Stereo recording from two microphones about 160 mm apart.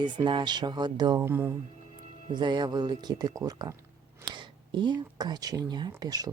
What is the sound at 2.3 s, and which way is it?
Speech, 30° right (ahead or behind).